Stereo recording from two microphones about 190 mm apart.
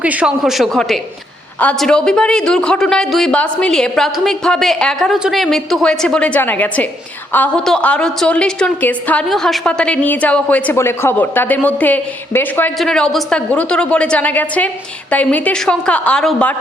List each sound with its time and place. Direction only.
0.0 s a woman's voice: 5° right (ahead or behind)